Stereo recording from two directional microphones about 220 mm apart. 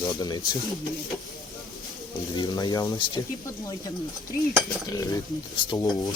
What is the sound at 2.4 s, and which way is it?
Speech, 20° left (ahead or behind).